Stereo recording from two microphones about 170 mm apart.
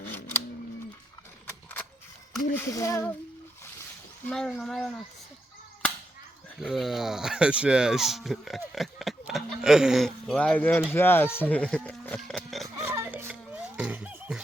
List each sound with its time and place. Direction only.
0.0 s scissors: 15° left (ahead or behind)
2.6 s speech: 15° left (ahead or behind)
4.3 s speech: 5° left (ahead or behind)
6.6 s speech: centre (ahead or behind)
12.6 s music: 20° right (ahead or behind)